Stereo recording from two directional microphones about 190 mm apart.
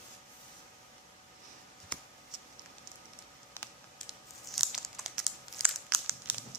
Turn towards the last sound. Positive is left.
turn(degrees=0)  # may be behind; listen again after turning